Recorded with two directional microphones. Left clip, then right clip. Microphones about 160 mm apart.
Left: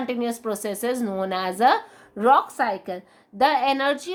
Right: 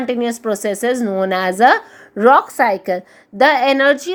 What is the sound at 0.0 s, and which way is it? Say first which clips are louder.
A woman's voice: right 7 dB; 25° right (ahead or behind).